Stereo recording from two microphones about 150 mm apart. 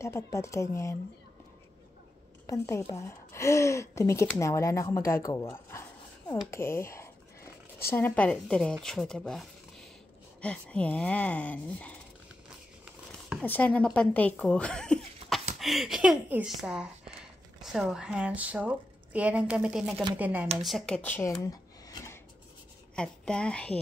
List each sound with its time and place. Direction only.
0.0 s a woman's voice: 20° left (ahead or behind)
2.4 s a woman's voice: 20° left (ahead or behind)
12.8 s a sound: 5° right (ahead or behind)
13.5 s a woman's voice: 10° left (ahead or behind); by 20.4 s 10° right (ahead or behind)
20.6 s a woman's voice: centre (ahead or behind)
21.3 s a sound: 25° left (ahead or behind)
22.9 s speech: 5° left (ahead or behind)